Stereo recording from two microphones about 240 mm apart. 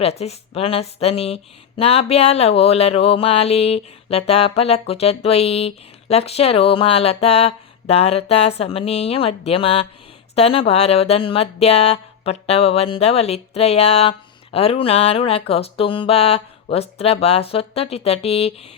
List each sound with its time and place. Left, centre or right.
0.0 s speech: left